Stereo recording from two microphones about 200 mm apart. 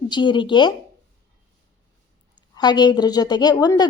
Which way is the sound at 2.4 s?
20° left (ahead or behind).